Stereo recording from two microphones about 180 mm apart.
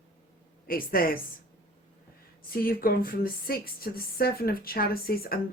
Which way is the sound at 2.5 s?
55° left (ahead or behind).